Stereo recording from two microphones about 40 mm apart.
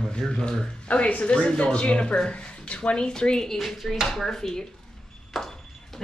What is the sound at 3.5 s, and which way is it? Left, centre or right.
Speech, centre.